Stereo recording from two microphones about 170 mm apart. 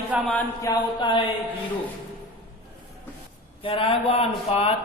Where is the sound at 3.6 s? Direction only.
35° left (ahead or behind).